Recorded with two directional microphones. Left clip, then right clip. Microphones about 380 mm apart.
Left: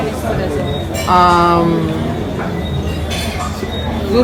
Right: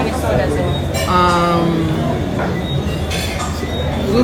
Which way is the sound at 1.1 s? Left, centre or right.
Centre.